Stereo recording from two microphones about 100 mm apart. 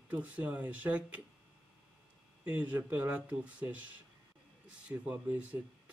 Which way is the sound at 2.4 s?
15° right (ahead or behind).